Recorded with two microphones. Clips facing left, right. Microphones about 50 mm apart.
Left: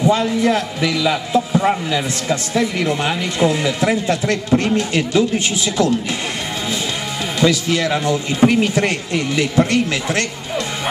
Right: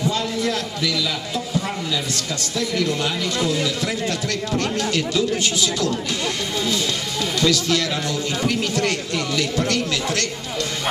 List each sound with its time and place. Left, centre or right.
0.0 s a man's voice: left
7.3 s a man's voice: left